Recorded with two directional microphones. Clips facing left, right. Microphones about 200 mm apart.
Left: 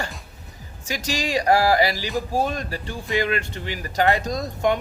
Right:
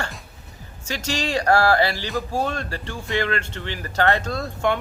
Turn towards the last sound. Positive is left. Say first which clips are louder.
# left 1 dB
turn(degrees=15)  # may be behind; listen again after turning